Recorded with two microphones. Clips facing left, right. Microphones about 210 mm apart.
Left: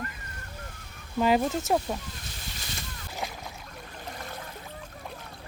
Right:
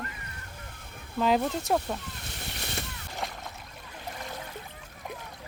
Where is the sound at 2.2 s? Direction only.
65° right (ahead or behind).